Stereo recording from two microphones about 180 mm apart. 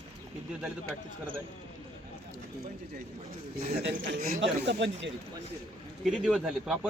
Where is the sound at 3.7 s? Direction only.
65° right (ahead or behind); by 5.1 s 80° right.